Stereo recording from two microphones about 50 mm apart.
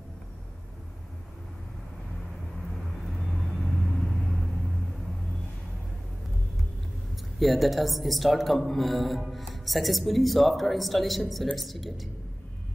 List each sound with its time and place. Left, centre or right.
3.1 s vehicle: centre
7.3 s a woman's voice: centre